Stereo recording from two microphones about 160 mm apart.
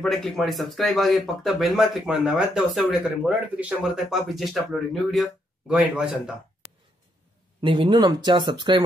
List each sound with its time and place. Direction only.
0.0 s speech: centre (ahead or behind)
7.6 s speech: 30° right (ahead or behind)